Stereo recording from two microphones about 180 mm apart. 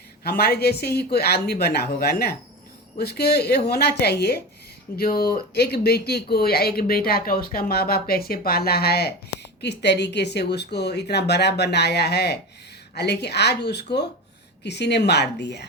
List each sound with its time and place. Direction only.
0.3 s speech: 60° left (ahead or behind)